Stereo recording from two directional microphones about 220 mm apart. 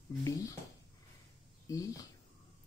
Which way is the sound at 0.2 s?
15° left (ahead or behind).